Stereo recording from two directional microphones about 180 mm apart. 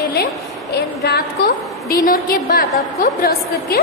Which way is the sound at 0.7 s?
65° left (ahead or behind).